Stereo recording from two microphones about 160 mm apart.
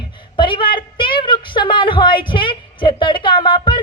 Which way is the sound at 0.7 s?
30° left (ahead or behind).